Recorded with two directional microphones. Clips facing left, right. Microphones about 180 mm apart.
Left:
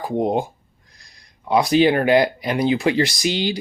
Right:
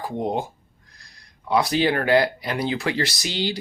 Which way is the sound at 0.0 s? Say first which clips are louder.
Left 5 dB; 15° left (ahead or behind).